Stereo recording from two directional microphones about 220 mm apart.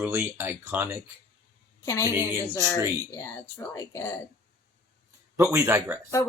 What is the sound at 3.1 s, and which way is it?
Speech, 15° left (ahead or behind).